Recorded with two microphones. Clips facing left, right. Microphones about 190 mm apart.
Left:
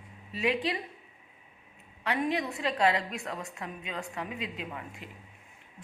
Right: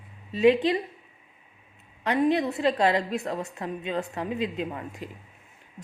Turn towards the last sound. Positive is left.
turn(degrees=-35)  # may be behind; listen again after turning